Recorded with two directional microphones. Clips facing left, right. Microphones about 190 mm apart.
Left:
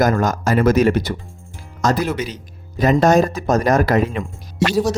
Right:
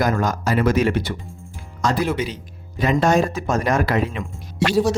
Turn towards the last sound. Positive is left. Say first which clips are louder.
# left 2 dB
turn(degrees=45)  # may be behind; listen again after turning